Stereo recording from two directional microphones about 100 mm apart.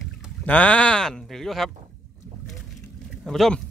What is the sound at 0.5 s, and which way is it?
Speech, 15° left (ahead or behind).